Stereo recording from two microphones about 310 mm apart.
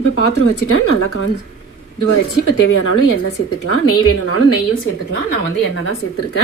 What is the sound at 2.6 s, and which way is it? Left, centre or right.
Speech, left.